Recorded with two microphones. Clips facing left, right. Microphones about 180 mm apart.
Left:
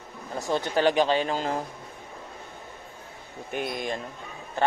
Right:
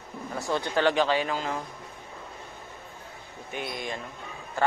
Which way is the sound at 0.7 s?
15° left (ahead or behind).